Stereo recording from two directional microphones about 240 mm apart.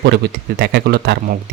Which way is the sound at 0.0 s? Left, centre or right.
Right.